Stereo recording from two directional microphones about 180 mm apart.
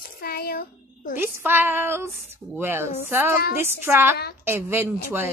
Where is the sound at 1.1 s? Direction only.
10° right (ahead or behind).